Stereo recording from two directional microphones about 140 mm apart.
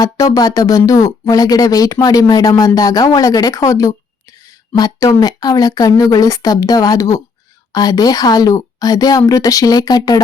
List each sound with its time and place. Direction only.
0.0 s speech: 25° left (ahead or behind)